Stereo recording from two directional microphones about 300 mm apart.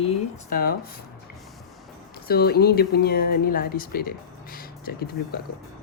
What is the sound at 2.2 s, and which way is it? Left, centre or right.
Speech, left.